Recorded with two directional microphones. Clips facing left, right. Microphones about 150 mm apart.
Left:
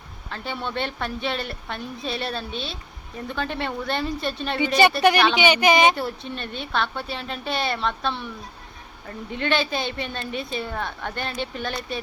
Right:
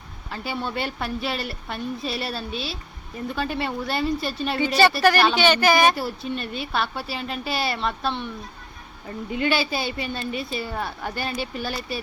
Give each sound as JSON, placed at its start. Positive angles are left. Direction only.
{"t": 0.3, "sound": "speech", "side_deg": -5}
{"t": 5.1, "sound": "speech", "side_deg": 20}
{"t": 6.0, "sound": "speech", "side_deg": -5}